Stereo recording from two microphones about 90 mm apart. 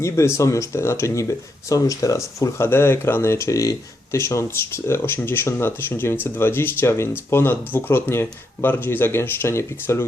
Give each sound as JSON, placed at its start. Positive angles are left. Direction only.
{"t": 0.0, "sound": "speech", "side_deg": 35}